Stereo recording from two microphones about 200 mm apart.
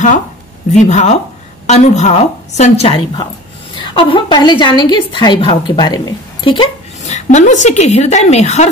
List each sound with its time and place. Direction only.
0.7 s a woman's voice: 35° left (ahead or behind)